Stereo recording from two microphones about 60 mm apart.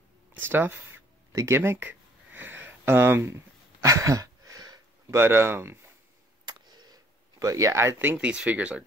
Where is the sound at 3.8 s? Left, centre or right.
Right.